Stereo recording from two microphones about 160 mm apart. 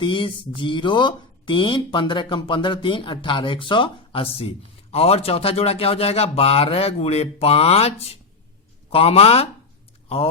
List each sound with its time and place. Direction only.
0.0 s speech: 30° left (ahead or behind)